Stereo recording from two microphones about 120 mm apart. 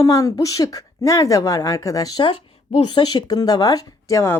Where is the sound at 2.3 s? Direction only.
45° left (ahead or behind).